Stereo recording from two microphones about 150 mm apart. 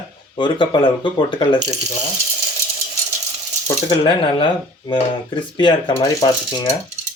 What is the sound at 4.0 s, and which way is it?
Speech, 35° left (ahead or behind).